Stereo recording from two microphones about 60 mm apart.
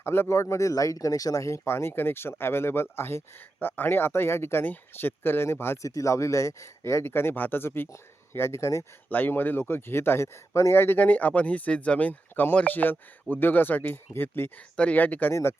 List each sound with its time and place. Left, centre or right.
0.0 s speech: left
5.8 s speech: left
9.0 s speech: left
14.8 s speech: left
15.3 s speech: left